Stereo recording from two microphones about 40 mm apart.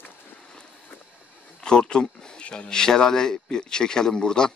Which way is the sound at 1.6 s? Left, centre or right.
Left.